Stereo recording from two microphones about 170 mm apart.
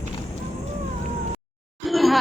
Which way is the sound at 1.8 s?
Centre (ahead or behind).